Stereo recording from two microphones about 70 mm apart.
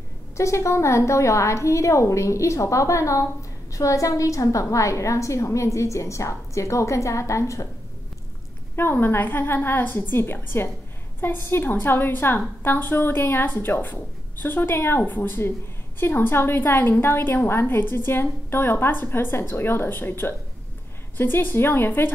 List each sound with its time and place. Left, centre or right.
0.4 s a woman's voice: left
8.7 s a woman's voice: left